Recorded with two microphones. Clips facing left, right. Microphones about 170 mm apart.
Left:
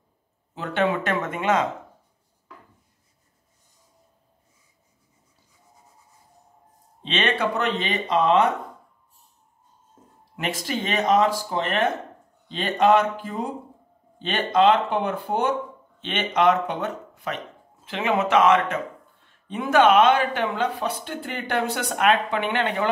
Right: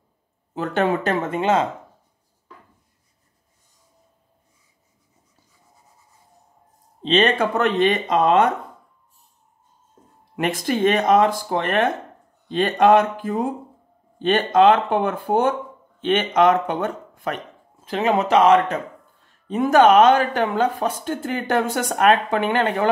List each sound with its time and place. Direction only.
0.6 s speech: 40° right (ahead or behind)
7.0 s speech: 35° right (ahead or behind)
10.3 s speech: 50° right (ahead or behind)